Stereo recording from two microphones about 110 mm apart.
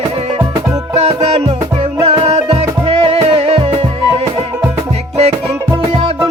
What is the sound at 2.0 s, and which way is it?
Music, 60° right (ahead or behind).